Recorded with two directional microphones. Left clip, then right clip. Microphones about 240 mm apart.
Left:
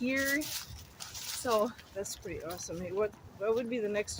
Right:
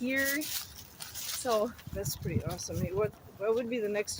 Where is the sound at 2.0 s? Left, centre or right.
Centre.